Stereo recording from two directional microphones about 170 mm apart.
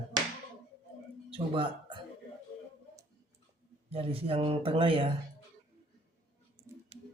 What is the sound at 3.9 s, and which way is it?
Speech, 35° right (ahead or behind).